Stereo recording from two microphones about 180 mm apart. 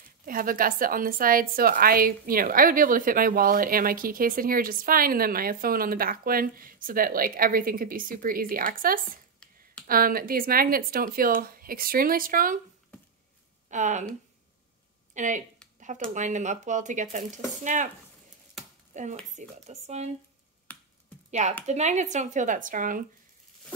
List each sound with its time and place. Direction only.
0.2 s a woman's voice: 50° right (ahead or behind)
13.7 s speech: 40° right (ahead or behind)
15.1 s a woman's voice: 45° right (ahead or behind)
18.9 s speech: 45° right (ahead or behind)
20.7 s finger snapping: 10° left (ahead or behind)
21.3 s a woman's voice: 40° right (ahead or behind)